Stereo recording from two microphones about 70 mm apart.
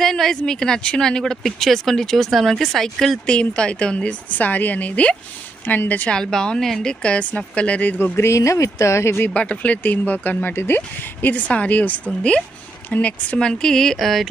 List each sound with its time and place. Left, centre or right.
0.0 s a woman's voice: centre; by 6.1 s left
6.1 s speech: centre
8.0 s speech: left
9.3 s a woman's voice: centre
12.1 s speech: centre